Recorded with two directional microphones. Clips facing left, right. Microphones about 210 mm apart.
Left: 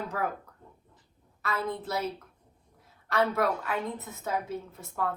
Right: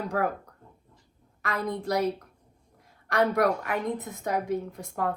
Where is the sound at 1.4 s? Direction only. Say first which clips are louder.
Right 2 dB; 15° right (ahead or behind).